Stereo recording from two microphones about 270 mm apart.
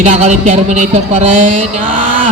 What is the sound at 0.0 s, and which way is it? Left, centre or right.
A man's voice, right.